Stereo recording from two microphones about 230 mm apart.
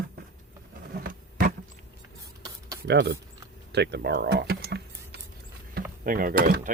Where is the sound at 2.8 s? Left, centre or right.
Right.